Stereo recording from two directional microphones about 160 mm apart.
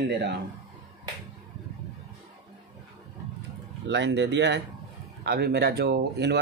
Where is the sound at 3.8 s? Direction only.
90° right.